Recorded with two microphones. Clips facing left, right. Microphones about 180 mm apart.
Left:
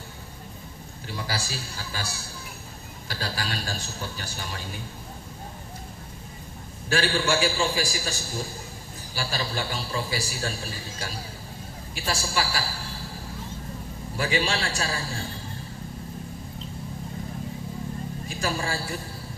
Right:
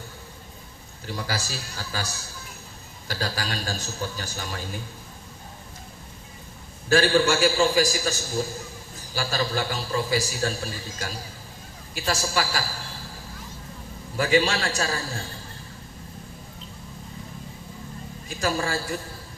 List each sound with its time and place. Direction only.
1.0 s a man's voice: 40° right (ahead or behind)
3.1 s a man's voice: 40° right (ahead or behind)
6.9 s a man's voice: 40° right (ahead or behind)
14.2 s a man's voice: 40° right (ahead or behind)
18.3 s a man's voice: 40° right (ahead or behind)